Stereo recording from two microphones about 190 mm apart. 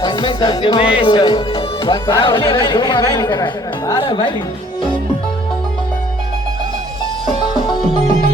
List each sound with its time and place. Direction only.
0.0 s speech: 25° left (ahead or behind)